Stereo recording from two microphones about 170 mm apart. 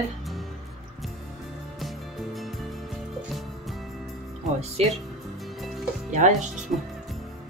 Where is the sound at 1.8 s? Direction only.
Centre (ahead or behind).